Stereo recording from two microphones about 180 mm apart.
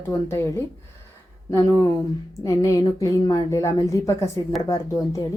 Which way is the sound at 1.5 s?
15° left (ahead or behind).